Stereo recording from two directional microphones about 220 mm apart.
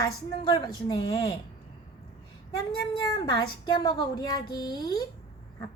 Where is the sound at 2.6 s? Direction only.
20° left (ahead or behind).